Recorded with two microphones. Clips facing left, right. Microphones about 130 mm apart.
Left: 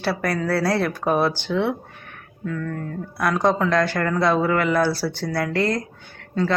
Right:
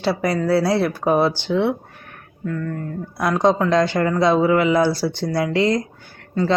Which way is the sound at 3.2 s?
15° right (ahead or behind).